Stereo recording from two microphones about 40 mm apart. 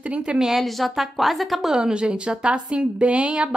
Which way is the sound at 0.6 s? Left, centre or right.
Centre.